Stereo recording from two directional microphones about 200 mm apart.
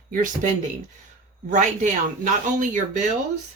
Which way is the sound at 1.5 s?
40° right (ahead or behind).